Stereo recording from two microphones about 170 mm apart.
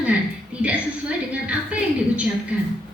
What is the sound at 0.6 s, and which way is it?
A woman's voice, 5° right (ahead or behind).